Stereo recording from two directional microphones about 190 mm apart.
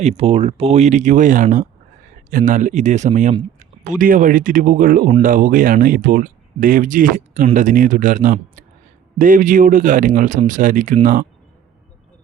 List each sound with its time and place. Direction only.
0.0 s speech: 35° right (ahead or behind)